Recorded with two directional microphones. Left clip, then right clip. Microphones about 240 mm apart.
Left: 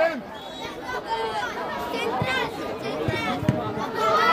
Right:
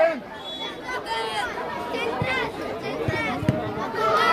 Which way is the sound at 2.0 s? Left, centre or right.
Left.